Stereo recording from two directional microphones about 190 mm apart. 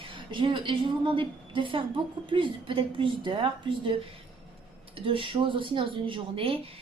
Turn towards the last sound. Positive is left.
turn(degrees=-30)  # may be behind; listen again after turning